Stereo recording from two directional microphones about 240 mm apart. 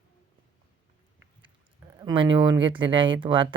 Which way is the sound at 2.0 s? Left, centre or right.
Centre.